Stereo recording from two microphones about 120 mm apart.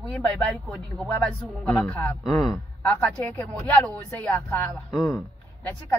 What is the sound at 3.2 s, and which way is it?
Speech, 15° left (ahead or behind).